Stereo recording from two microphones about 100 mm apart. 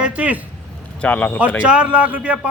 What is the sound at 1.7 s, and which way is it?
Speech, 10° right (ahead or behind).